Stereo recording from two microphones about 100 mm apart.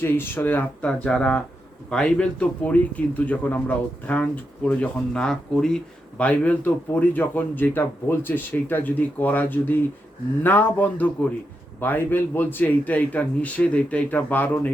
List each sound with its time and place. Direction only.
0.0 s a man's voice: 20° left (ahead or behind)